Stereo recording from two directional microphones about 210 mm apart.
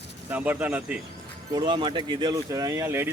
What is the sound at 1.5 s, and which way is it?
Speech, 20° right (ahead or behind).